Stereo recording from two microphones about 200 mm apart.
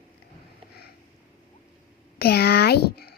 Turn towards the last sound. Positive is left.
turn(degrees=50)  # may be behind; listen again after turning